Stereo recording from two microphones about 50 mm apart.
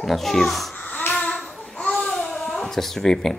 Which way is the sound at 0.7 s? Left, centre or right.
Left.